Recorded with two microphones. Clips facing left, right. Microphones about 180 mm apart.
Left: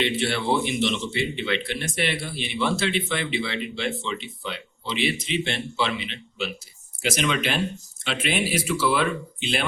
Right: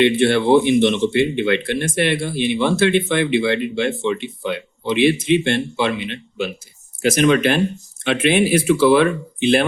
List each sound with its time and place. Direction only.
0.0 s speech: 55° right (ahead or behind)